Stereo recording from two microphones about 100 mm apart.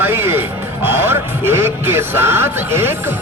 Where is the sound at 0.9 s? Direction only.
25° right (ahead or behind).